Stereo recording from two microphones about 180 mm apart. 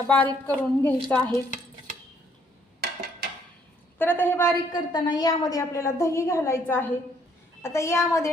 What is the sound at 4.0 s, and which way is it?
Speech, 10° left (ahead or behind).